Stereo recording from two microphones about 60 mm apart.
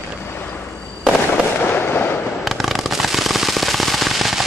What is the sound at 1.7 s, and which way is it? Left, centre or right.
Fireworks, left.